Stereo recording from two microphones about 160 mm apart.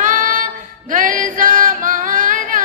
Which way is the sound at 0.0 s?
55° right (ahead or behind).